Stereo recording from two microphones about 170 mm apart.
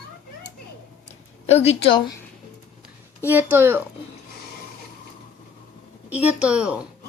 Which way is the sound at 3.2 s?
10° right (ahead or behind).